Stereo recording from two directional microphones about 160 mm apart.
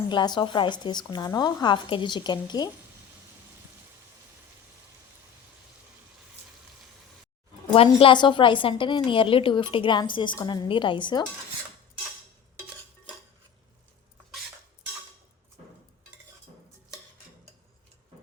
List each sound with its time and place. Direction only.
0.1 s a woman's voice: 30° left (ahead or behind)
7.9 s a woman's voice: 30° left (ahead or behind)